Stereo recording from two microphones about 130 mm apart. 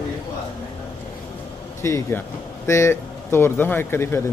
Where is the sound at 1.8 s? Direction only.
20° left (ahead or behind).